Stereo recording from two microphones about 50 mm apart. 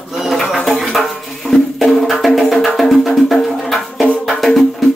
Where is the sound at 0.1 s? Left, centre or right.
Centre.